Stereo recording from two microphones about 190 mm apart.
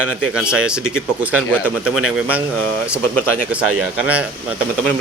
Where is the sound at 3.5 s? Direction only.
5° right (ahead or behind).